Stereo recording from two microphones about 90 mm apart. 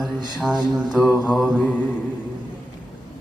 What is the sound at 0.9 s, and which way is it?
Music, 10° right (ahead or behind).